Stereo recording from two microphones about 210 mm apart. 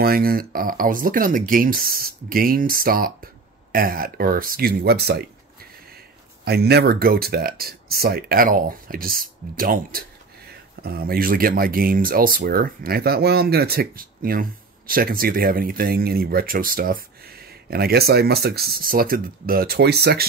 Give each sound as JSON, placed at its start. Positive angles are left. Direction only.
{"t": 0.0, "sound": "speech", "side_deg": -45}
{"t": 6.4, "sound": "speech", "side_deg": -50}